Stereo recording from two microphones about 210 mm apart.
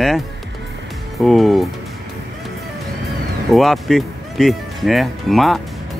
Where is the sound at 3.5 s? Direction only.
Centre (ahead or behind).